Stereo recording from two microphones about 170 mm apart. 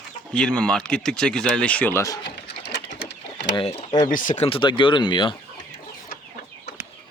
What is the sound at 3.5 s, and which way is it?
Speech, 35° left (ahead or behind).